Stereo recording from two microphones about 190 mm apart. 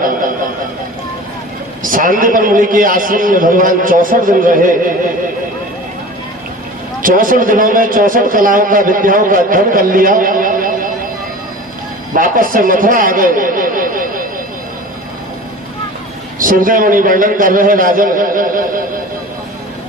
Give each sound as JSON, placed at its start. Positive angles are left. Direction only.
{"t": 1.8, "sound": "a man's voice", "side_deg": -45}
{"t": 7.0, "sound": "a man's voice", "side_deg": -45}
{"t": 12.1, "sound": "speech", "side_deg": -45}
{"t": 16.4, "sound": "a man's voice", "side_deg": -45}